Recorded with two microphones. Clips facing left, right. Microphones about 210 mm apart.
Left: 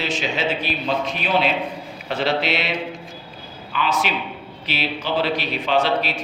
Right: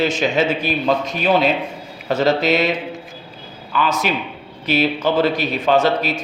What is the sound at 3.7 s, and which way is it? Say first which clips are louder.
A man's voice: right 3 dB; 45° right (ahead or behind).